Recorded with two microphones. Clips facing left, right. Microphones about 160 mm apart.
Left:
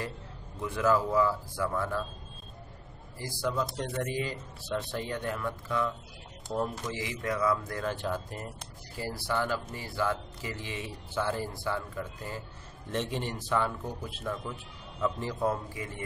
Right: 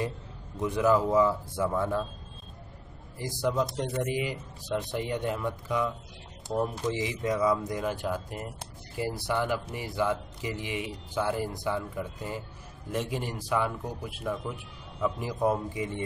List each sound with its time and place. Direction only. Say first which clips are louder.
0.6 s a man's voice: right 3 dB; 20° right (ahead or behind)
3.2 s a man's voice: right 3 dB; 20° right (ahead or behind)